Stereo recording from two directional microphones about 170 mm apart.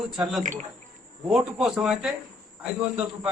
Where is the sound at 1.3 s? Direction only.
Centre (ahead or behind).